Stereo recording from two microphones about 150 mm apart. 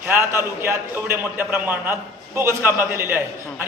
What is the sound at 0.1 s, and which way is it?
A man's voice, 15° right (ahead or behind).